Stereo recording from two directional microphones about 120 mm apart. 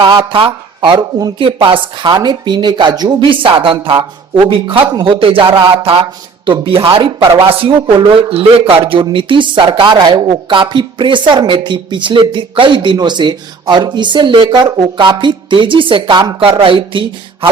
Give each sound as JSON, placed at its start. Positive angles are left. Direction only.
{"t": 0.0, "sound": "speech", "side_deg": -40}